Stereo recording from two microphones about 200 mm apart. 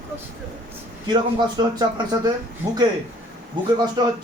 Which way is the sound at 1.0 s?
20° right (ahead or behind).